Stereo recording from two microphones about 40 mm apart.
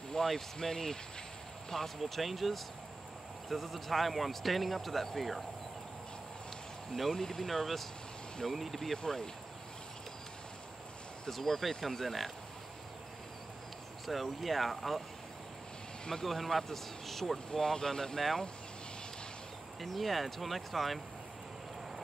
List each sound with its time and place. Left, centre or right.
0.1 s speech: centre
2.0 s speech: centre
6.9 s speech: centre
8.9 s speech: centre
11.2 s speech: centre
14.0 s speech: centre
16.1 s speech: centre
17.5 s speech: centre
19.8 s speech: centre